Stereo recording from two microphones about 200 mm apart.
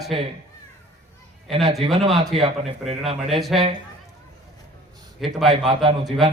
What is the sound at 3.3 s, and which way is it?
Speech, centre (ahead or behind).